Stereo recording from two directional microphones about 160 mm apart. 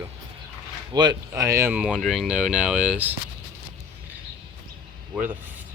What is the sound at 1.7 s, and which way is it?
Speech, 5° right (ahead or behind).